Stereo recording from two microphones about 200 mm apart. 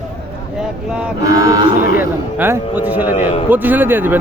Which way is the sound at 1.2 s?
15° right (ahead or behind).